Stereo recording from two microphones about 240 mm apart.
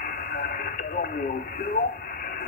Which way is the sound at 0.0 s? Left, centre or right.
Left.